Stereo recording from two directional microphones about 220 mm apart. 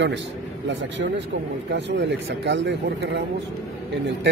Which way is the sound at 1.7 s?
55° right (ahead or behind).